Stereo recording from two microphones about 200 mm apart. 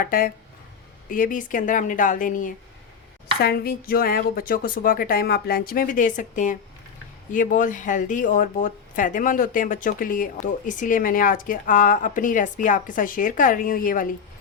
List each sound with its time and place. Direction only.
0.0 s speech: 45° left (ahead or behind)